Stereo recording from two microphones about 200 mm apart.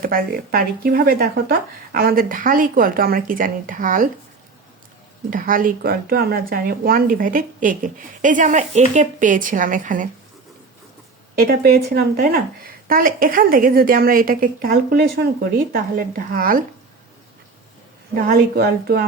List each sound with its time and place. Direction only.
0.0 s speech: 45° right (ahead or behind)
5.3 s speech: 45° right (ahead or behind)
11.3 s speech: 45° right (ahead or behind)
18.2 s speech: 50° right (ahead or behind)